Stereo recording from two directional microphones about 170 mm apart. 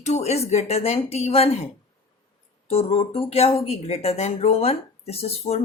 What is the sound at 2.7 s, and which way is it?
Speech, 35° left (ahead or behind).